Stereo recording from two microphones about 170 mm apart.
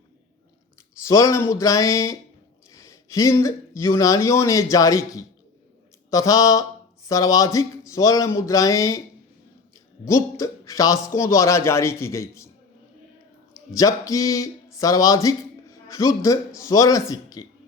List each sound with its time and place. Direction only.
1.0 s speech: 20° left (ahead or behind)
10.1 s a man's voice: 20° left (ahead or behind)
13.5 s speech: 20° left (ahead or behind)